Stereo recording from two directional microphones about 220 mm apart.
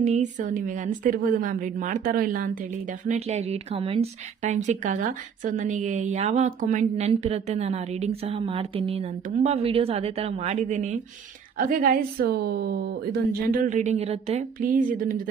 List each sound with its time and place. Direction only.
0.0 s a woman's voice: 35° right (ahead or behind)
3.1 s a woman's voice: 30° right (ahead or behind)